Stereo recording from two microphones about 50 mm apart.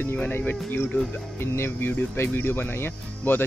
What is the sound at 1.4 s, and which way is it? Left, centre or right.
Speech, left.